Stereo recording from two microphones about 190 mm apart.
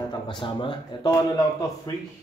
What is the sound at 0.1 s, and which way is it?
Speech, 25° left (ahead or behind).